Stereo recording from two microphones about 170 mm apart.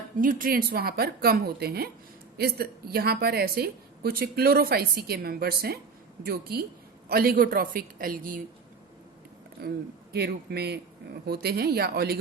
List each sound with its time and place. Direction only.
0.2 s a woman's voice: 55° right (ahead or behind)
9.6 s a woman's voice: 65° right (ahead or behind)